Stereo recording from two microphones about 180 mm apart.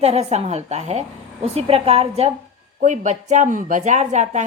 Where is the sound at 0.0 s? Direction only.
35° right (ahead or behind).